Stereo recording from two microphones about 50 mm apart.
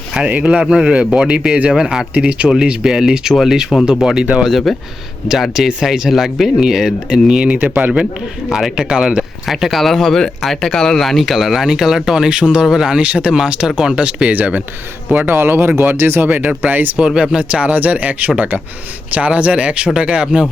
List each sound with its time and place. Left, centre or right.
0.3 s speech: right; by 2.0 s centre
2.1 s speech: right
4.4 s speech: centre
5.3 s speech: centre
7.4 s speech: right
8.4 s speech: centre
9.5 s speech: centre
13.0 s speech: right
14.0 s speech: right
15.3 s speech: right
16.2 s speech: right